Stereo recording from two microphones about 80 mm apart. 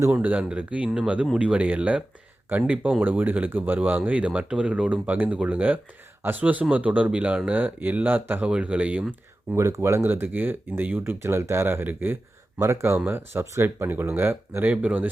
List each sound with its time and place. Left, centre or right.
0.1 s speech: centre
9.6 s speech: right; by 15.1 s centre